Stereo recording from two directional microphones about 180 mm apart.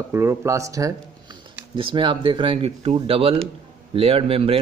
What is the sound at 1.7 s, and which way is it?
A man's voice, 30° right (ahead or behind).